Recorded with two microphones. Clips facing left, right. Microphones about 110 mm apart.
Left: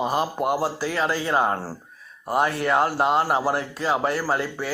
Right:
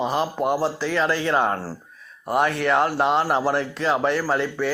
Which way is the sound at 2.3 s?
30° left (ahead or behind).